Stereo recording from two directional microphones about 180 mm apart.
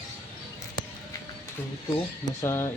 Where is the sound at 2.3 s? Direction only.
15° left (ahead or behind).